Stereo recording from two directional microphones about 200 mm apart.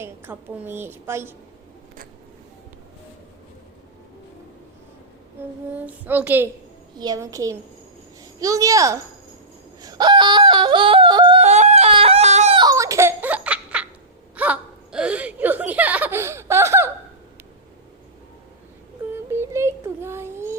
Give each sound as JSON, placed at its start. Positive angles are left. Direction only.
{"t": 0.0, "sound": "a woman's voice", "side_deg": -10}
{"t": 5.4, "sound": "a woman's voice", "side_deg": -10}
{"t": 9.8, "sound": "yodeling", "side_deg": -20}
{"t": 14.3, "sound": "hiccup", "side_deg": -5}
{"t": 19.1, "sound": "child singing", "side_deg": -10}